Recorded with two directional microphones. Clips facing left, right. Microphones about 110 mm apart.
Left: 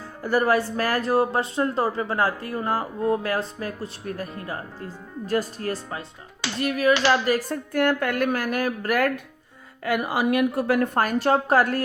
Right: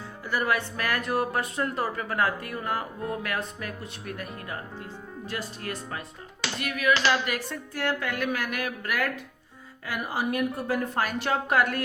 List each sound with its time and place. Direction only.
0.2 s speech: 40° left (ahead or behind)
5.2 s speech: 40° left (ahead or behind)
9.8 s speech: 65° left (ahead or behind); by 10.8 s 80° left
10.9 s speech: 45° left (ahead or behind)